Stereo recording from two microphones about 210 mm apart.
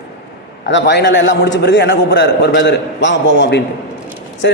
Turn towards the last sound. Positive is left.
turn(degrees=55)  # may be behind; listen again after turning